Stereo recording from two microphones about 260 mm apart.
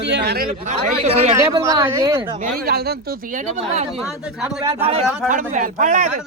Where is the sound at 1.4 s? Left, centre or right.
Centre.